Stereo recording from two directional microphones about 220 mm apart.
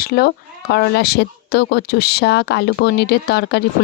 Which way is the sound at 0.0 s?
45° left (ahead or behind).